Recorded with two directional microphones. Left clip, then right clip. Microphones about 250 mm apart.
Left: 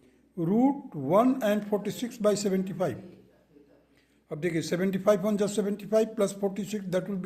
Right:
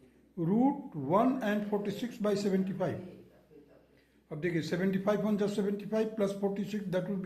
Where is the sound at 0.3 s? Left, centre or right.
Left.